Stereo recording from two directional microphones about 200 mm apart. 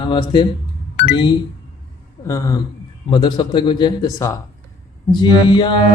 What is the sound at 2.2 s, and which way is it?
Speech, 15° left (ahead or behind).